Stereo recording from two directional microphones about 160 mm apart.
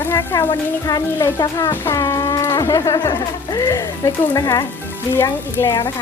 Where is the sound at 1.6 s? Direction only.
15° left (ahead or behind).